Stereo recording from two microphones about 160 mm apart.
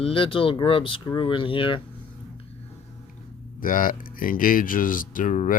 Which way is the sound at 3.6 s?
60° left (ahead or behind).